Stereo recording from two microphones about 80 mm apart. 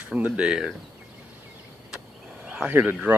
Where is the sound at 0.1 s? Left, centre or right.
Centre.